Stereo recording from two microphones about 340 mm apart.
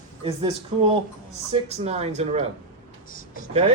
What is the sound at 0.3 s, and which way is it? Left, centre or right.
Speech, centre.